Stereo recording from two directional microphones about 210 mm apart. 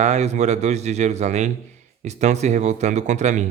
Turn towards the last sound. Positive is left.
turn(degrees=-35)  # may be behind; listen again after turning